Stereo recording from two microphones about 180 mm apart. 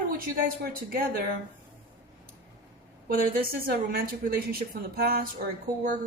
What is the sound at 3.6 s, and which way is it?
A woman's voice, 55° right (ahead or behind).